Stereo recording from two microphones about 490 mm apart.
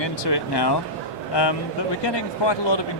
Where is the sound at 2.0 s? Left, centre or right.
Left.